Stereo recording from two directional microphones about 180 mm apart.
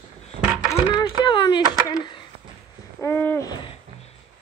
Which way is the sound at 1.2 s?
25° left (ahead or behind).